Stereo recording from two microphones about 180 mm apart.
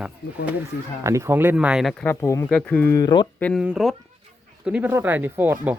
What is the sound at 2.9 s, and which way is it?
Speech, 25° left (ahead or behind).